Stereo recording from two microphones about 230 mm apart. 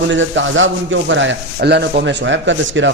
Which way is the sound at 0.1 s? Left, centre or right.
Right.